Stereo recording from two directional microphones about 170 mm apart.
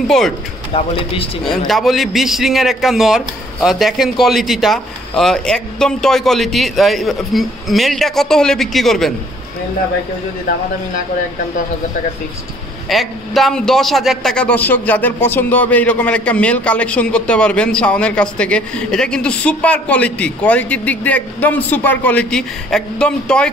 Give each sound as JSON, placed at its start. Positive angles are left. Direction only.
{"t": 0.7, "sound": "speech", "side_deg": 30}
{"t": 1.7, "sound": "a man's voice", "side_deg": 0}
{"t": 12.9, "sound": "a man's voice", "side_deg": 0}